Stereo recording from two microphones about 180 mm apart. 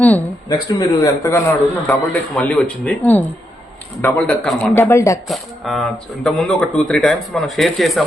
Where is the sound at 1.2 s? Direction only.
15° left (ahead or behind).